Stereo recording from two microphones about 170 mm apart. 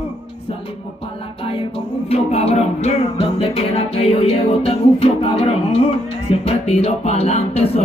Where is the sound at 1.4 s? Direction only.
35° left (ahead or behind).